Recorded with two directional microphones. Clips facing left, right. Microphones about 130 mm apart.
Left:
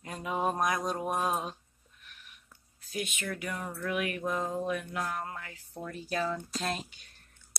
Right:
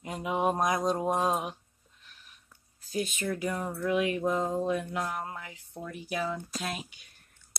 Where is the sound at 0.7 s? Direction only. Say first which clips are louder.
Right 4 dB; 25° right (ahead or behind).